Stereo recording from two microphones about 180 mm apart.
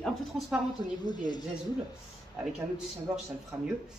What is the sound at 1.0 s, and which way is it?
Speech, 25° left (ahead or behind).